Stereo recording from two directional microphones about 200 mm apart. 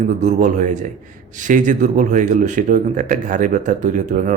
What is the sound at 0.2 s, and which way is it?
Speech, 35° right (ahead or behind).